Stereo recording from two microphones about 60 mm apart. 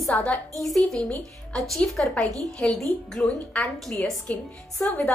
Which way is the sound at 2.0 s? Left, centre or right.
Centre.